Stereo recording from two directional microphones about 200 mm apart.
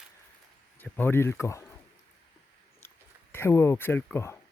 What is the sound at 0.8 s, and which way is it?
Speech, 10° left (ahead or behind).